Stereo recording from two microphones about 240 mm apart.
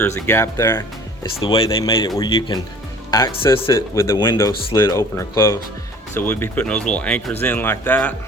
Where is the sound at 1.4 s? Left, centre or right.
Left; by 8.2 s centre.